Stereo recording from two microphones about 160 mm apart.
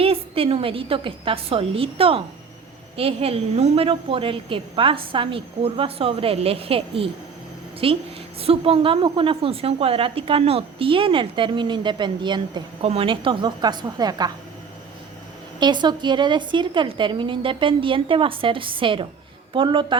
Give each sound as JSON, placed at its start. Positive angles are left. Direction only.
{"t": 0.0, "sound": "a woman's voice", "side_deg": -35}
{"t": 15.6, "sound": "a woman's voice", "side_deg": -25}